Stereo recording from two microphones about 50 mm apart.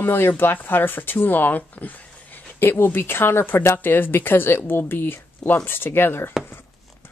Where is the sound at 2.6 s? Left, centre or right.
Left.